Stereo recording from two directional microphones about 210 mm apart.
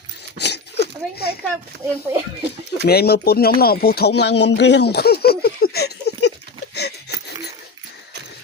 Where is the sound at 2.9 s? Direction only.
50° left (ahead or behind).